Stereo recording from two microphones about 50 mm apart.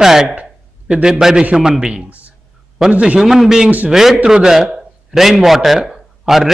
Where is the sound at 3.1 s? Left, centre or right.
Centre.